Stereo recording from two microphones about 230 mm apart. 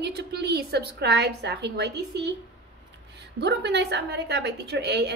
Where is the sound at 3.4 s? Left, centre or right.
Right.